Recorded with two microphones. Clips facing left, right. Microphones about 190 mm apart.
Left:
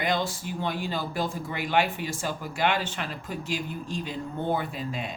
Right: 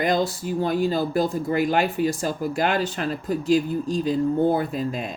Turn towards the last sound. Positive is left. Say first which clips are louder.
# right 8 dB
turn(degrees=-40)  # may be behind; listen again after turning